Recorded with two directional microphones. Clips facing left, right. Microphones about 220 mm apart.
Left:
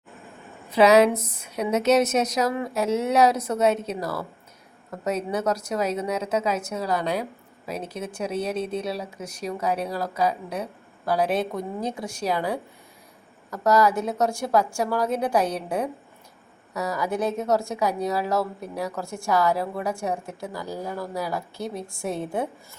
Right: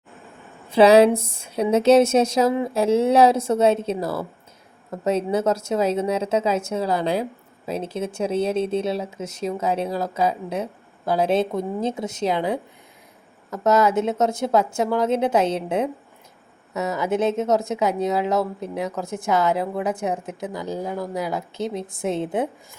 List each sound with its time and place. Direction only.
0.7 s speech: 30° right (ahead or behind)